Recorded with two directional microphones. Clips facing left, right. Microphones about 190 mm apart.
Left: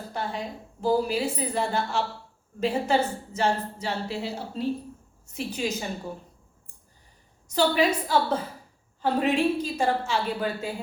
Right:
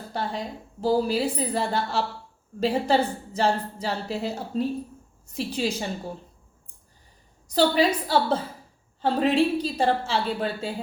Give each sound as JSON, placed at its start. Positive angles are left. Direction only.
{"t": 0.1, "sound": "a woman's voice", "side_deg": -35}
{"t": 7.4, "sound": "a woman's voice", "side_deg": -35}